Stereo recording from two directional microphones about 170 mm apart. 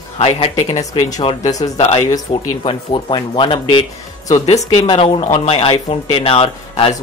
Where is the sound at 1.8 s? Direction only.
35° left (ahead or behind).